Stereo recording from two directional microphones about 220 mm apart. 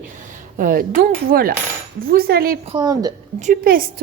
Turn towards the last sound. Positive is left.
turn(degrees=-40)  # may be behind; listen again after turning